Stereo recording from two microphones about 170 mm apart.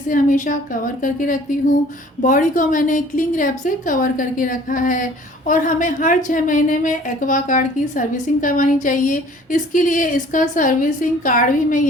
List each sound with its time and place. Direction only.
0.1 s a woman's voice: 50° left (ahead or behind)